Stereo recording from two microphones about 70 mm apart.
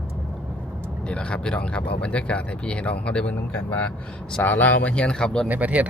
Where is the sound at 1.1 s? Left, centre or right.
Centre.